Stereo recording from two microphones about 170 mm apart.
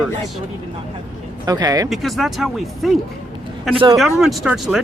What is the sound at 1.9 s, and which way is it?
Speech, centre (ahead or behind).